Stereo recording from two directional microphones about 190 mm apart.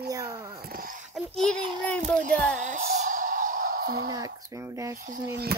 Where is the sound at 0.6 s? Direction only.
50° right (ahead or behind).